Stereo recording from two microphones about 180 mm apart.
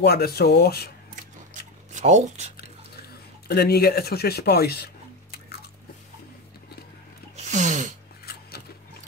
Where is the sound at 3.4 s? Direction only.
60° left (ahead or behind).